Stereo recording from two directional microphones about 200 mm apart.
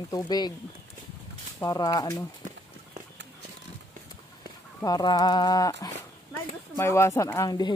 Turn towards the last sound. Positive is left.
turn(degrees=15)  # may be behind; listen again after turning